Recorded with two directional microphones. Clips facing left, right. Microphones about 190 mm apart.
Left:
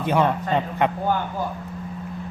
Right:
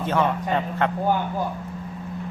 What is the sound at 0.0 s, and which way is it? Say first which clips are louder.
Speech: left 2 dB; 15° left (ahead or behind).